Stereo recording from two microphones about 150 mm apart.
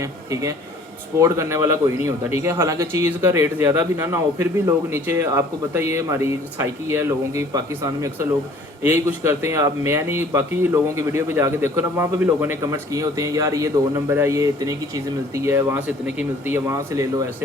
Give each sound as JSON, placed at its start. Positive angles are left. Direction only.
{"t": 0.0, "sound": "a man's voice", "side_deg": -20}